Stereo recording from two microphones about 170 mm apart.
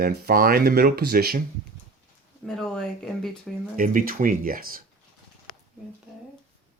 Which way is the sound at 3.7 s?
55° right (ahead or behind).